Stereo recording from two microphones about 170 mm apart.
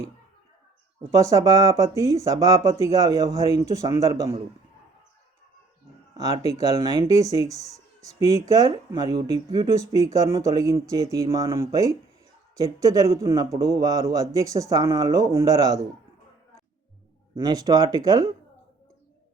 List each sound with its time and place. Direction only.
1.1 s speech: 20° right (ahead or behind)
6.2 s speech: 20° right (ahead or behind)
17.3 s speech: 20° right (ahead or behind)